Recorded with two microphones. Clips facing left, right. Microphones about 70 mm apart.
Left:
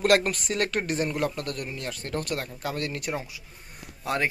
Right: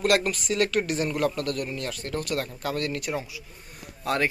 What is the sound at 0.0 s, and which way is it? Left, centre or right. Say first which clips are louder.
Speech: left 1 dB; left.